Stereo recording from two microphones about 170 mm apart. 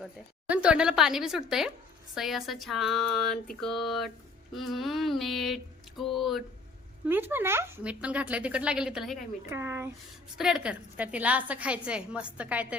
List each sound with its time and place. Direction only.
0.0 s speech: 5° right (ahead or behind)
7.1 s a woman's voice: 10° right (ahead or behind)
9.5 s a woman's voice: 15° right (ahead or behind)
10.3 s a woman's voice: 5° right (ahead or behind)